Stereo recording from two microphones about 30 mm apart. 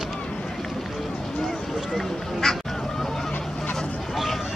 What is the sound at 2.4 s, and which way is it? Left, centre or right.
Goose, centre.